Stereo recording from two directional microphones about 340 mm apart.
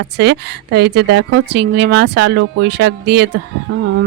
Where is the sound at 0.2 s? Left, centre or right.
Right.